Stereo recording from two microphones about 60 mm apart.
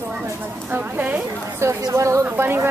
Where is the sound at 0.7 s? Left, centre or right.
Right.